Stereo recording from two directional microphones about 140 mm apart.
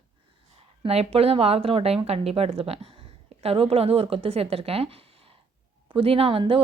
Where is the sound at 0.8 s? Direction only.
45° right (ahead or behind).